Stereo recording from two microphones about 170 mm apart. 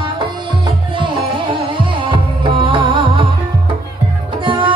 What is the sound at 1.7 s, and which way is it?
Music, 30° right (ahead or behind).